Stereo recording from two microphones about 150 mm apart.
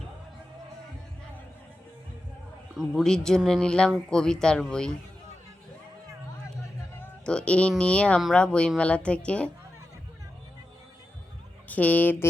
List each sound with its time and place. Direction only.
2.7 s speech: centre (ahead or behind)
7.0 s music: 5° left (ahead or behind)
7.7 s a woman's voice: 5° left (ahead or behind)
11.7 s a woman's voice: 10° left (ahead or behind)